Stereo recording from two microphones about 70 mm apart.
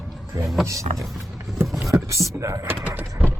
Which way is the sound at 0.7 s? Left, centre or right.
Right.